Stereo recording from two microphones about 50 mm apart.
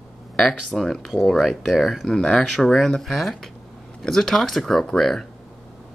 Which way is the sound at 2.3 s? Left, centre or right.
Centre.